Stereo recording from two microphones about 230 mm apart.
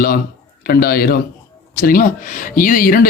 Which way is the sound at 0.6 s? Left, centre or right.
Left.